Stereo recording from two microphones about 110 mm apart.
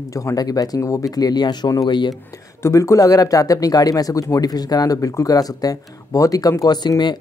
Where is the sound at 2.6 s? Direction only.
25° left (ahead or behind).